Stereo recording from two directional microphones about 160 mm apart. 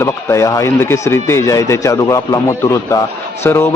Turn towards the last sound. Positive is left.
turn(degrees=15)  # may be behind; listen again after turning